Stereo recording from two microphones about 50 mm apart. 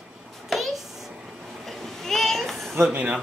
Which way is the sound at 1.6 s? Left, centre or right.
Centre.